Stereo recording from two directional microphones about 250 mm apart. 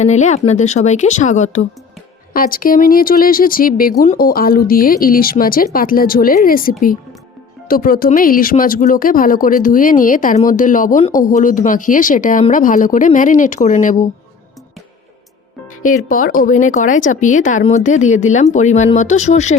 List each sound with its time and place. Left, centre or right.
0.0 s speech: left
15.8 s speech: left